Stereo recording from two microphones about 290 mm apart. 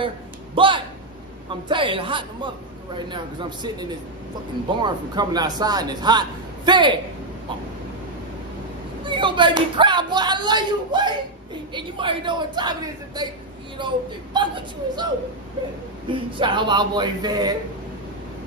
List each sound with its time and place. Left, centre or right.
0.6 s a man's voice: centre
9.0 s a man's voice: centre
16.1 s a man's voice: centre